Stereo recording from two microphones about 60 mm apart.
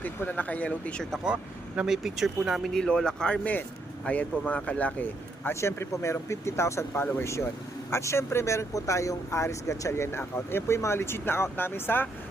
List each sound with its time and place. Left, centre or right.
0.3 s speech: left
1.2 s speech: centre
1.9 s speech: centre
2.7 s speech: centre
4.0 s speech: left
5.5 s speech: left